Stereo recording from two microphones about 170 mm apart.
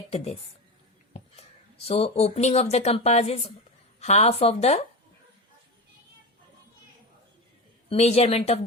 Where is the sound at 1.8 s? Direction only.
35° left (ahead or behind).